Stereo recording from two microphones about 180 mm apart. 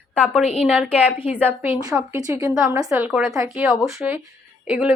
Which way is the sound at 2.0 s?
20° right (ahead or behind).